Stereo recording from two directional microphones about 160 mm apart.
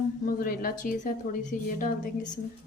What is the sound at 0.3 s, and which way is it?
A woman's voice, 60° left (ahead or behind).